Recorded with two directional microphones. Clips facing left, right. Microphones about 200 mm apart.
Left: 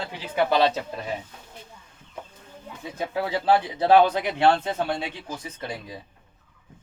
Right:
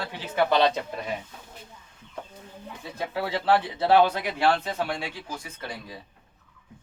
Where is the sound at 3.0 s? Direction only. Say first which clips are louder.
Left 2 dB; 15° left (ahead or behind).